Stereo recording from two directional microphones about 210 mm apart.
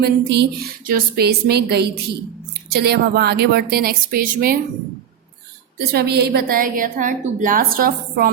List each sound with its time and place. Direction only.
0.0 s a woman's voice: 50° right (ahead or behind)
5.9 s a woman's voice: 50° right (ahead or behind)